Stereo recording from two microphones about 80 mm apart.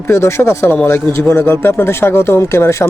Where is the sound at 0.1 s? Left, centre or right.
Left.